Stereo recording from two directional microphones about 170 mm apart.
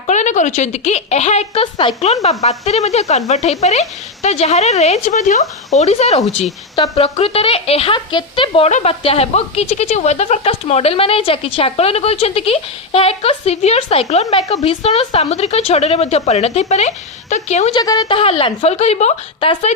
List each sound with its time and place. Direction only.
0.1 s a woman's voice: 45° left (ahead or behind)
17.7 s a woman's voice: 25° left (ahead or behind)